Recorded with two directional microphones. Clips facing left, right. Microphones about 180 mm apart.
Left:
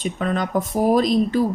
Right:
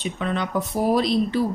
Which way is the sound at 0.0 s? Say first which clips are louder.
Left 3 dB; 45° left (ahead or behind).